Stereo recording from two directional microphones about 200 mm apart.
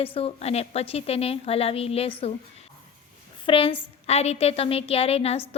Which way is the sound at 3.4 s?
25° left (ahead or behind).